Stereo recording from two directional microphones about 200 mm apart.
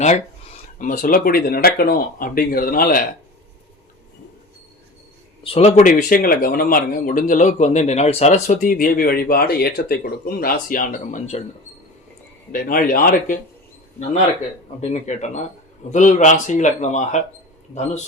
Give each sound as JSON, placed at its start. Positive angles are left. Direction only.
{"t": 0.8, "sound": "speech", "side_deg": 45}
{"t": 5.4, "sound": "speech", "side_deg": 30}
{"t": 12.5, "sound": "speech", "side_deg": 45}
{"t": 14.8, "sound": "speech", "side_deg": 35}